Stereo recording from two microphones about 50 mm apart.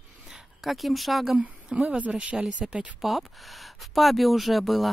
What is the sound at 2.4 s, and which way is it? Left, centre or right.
Speech, centre.